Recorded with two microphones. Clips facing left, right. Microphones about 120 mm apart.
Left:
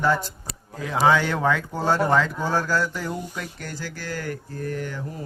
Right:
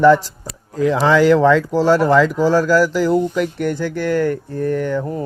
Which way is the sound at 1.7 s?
90° right.